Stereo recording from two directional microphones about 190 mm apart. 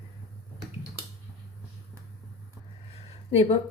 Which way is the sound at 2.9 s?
30° left (ahead or behind).